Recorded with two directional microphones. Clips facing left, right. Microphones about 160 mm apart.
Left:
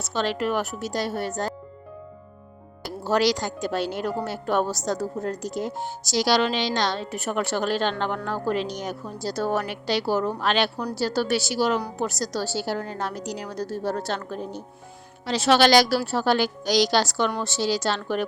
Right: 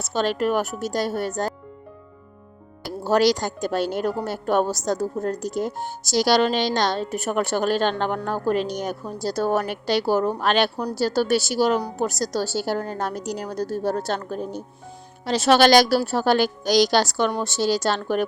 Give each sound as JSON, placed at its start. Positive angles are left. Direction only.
{"t": 0.1, "sound": "a woman's voice", "side_deg": -45}
{"t": 3.1, "sound": "a woman's voice", "side_deg": -45}